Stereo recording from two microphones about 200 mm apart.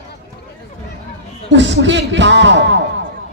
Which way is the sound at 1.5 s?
65° right (ahead or behind).